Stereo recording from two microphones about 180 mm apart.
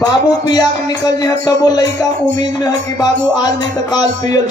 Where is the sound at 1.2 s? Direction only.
20° left (ahead or behind).